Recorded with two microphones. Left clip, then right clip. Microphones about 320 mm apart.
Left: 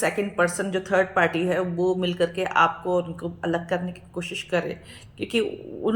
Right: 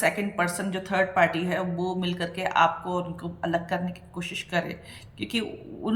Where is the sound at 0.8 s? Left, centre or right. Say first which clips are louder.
Left 1 dB; right.